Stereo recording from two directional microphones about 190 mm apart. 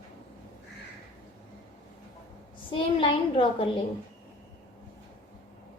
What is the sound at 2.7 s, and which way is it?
Speech, 30° left (ahead or behind).